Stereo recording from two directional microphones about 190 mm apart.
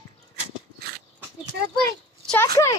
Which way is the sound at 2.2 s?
10° left (ahead or behind).